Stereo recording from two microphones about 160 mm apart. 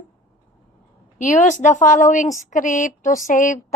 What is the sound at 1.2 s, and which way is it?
Speech, 50° left (ahead or behind).